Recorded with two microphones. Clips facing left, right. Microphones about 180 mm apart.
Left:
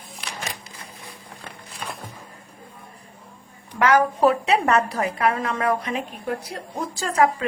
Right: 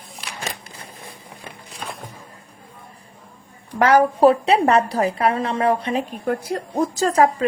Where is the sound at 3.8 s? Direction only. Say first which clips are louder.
Right 4 dB; 35° right (ahead or behind).